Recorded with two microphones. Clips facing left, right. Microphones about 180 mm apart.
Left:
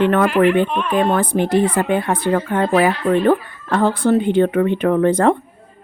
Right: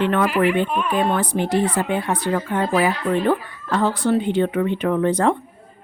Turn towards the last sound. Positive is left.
turn(degrees=55)  # may be behind; listen again after turning